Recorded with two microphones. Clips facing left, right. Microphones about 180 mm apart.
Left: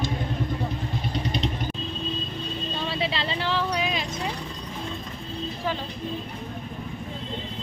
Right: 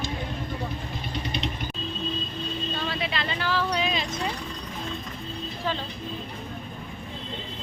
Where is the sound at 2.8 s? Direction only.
30° left (ahead or behind).